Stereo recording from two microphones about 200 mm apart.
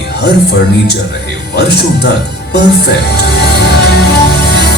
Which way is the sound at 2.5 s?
55° left (ahead or behind).